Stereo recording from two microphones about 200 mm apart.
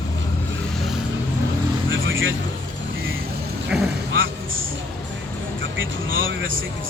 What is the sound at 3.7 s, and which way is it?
Vehicle, centre (ahead or behind).